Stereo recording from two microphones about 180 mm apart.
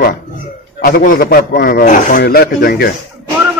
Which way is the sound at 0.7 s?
55° left (ahead or behind).